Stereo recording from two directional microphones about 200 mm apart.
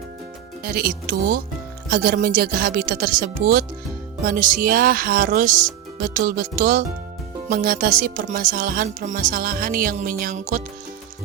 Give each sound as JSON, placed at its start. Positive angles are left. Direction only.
{"t": 0.6, "sound": "speech", "side_deg": -50}